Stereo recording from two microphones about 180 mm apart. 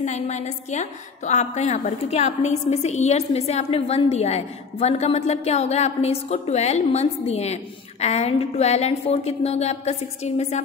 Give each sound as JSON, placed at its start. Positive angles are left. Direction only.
{"t": 0.0, "sound": "a woman's voice", "side_deg": 40}